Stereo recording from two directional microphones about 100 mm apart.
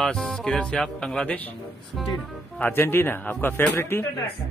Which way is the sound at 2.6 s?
20° left (ahead or behind).